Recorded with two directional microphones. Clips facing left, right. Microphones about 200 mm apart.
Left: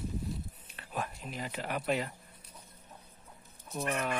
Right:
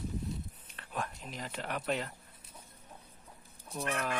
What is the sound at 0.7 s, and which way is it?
Speech, 5° left (ahead or behind).